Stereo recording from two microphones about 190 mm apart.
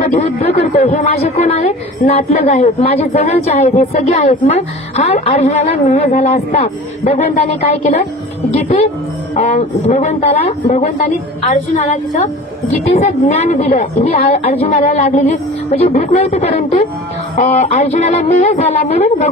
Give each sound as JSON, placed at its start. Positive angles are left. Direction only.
{"t": 0.1, "sound": "speech", "side_deg": 35}
{"t": 7.6, "sound": "speech", "side_deg": 30}